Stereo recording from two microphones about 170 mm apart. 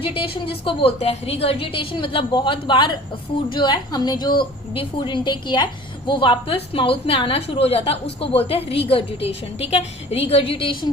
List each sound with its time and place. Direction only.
0.0 s a woman's voice: 30° left (ahead or behind)